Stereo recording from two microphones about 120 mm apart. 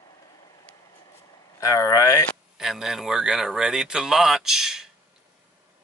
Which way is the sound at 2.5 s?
5° right (ahead or behind).